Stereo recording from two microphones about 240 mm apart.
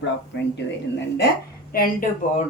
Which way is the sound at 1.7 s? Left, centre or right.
Left.